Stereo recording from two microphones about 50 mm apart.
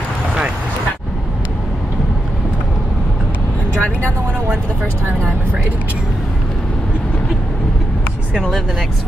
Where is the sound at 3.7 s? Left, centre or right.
Left.